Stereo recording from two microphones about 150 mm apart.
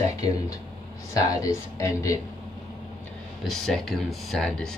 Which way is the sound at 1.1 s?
25° left (ahead or behind).